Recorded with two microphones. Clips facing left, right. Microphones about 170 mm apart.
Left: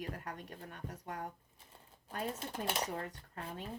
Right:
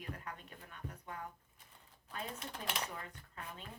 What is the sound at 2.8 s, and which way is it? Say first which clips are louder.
Speech: left 6 dB; 40° left (ahead or behind).